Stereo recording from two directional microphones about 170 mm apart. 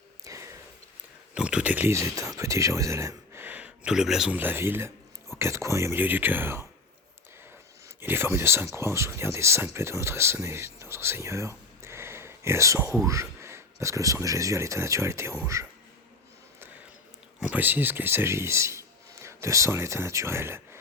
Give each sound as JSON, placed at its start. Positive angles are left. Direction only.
{"t": 0.3, "sound": "a sound", "side_deg": -20}
{"t": 1.3, "sound": "speech", "side_deg": -5}
{"t": 8.0, "sound": "speech", "side_deg": -15}
{"t": 17.4, "sound": "a man's voice", "side_deg": -10}